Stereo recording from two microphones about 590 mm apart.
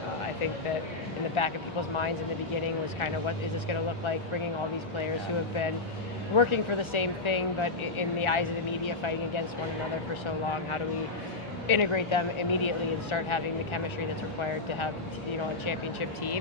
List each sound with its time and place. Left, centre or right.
1.4 s speech: left
3.0 s speech: left
6.3 s speech: left
11.7 s speech: left
15.6 s speech: left